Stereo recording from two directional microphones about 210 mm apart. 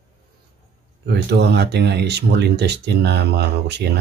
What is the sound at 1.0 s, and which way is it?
Speech, 55° right (ahead or behind).